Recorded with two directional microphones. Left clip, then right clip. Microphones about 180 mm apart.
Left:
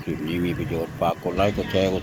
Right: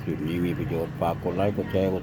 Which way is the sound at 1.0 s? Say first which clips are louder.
Left 4 dB; centre (ahead or behind).